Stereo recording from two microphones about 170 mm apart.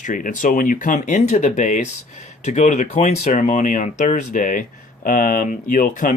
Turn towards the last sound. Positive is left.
turn(degrees=50)  # may be behind; listen again after turning